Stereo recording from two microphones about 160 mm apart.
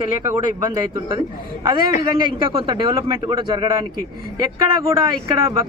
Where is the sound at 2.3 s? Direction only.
30° right (ahead or behind).